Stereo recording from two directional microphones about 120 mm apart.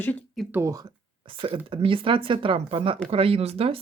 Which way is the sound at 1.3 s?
45° right (ahead or behind).